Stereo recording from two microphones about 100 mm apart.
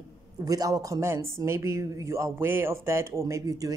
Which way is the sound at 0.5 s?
35° right (ahead or behind).